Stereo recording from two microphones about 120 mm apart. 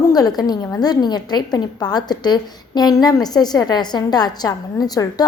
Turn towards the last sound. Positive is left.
turn(degrees=35)  # may be behind; listen again after turning